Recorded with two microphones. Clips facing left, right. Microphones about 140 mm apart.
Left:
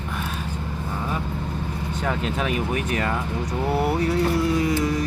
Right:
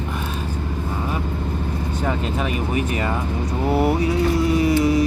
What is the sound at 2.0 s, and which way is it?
Speech, centre (ahead or behind).